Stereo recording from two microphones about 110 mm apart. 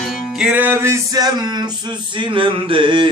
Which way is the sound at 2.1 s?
50° right (ahead or behind).